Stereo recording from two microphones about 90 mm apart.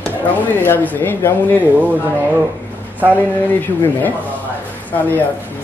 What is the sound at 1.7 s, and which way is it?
Speech, 20° right (ahead or behind).